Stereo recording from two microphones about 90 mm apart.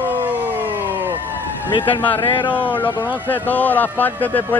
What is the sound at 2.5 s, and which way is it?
Speech, 20° left (ahead or behind).